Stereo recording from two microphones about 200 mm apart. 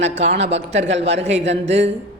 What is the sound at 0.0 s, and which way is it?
Speech, 35° right (ahead or behind).